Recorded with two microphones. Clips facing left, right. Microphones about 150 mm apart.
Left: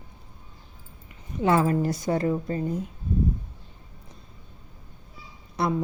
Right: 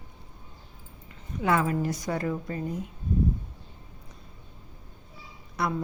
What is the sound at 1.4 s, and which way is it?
A woman's voice, 30° left (ahead or behind).